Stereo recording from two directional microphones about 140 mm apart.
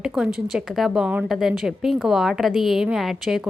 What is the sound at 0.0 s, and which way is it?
A woman's voice, 5° right (ahead or behind).